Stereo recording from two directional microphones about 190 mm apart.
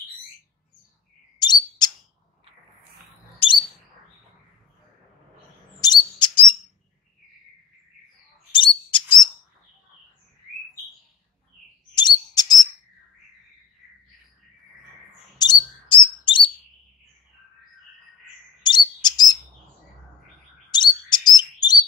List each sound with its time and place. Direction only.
1.4 s bird: 20° left (ahead or behind)
5.8 s chirp: 20° left (ahead or behind)
6.1 s bird: 25° left (ahead or behind)
8.5 s bird: 25° left (ahead or behind)
11.9 s chirp: 20° left (ahead or behind)
15.3 s bird: 25° left (ahead or behind)
18.6 s chirp: 25° left (ahead or behind)
20.7 s chirp: 20° left (ahead or behind)